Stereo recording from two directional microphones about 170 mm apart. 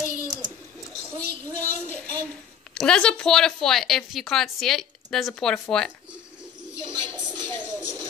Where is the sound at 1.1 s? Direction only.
20° right (ahead or behind).